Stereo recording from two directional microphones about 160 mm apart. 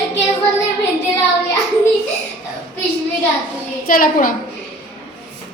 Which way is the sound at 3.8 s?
60° left (ahead or behind).